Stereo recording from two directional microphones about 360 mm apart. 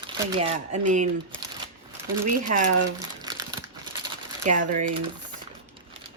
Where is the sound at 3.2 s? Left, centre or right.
Centre.